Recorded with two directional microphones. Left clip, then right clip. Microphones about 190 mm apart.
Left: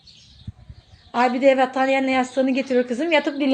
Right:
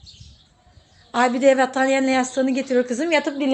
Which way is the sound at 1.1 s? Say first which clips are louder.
Even; centre (ahead or behind).